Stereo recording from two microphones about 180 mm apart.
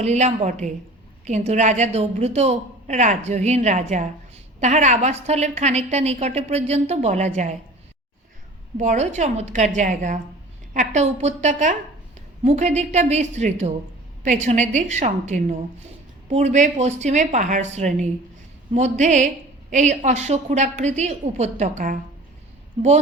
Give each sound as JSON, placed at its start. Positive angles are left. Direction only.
{"t": 0.0, "sound": "a woman's voice", "side_deg": -40}
{"t": 8.8, "sound": "a woman's voice", "side_deg": -40}